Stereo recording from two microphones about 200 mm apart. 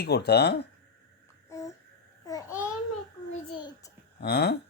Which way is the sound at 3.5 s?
20° left (ahead or behind).